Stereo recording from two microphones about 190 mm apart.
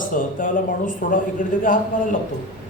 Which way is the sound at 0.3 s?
45° left (ahead or behind).